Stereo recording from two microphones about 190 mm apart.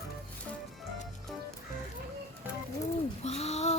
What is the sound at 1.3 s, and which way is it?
Music, centre (ahead or behind).